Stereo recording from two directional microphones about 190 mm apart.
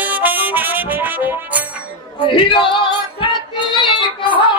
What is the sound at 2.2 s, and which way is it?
Speech, 25° left (ahead or behind).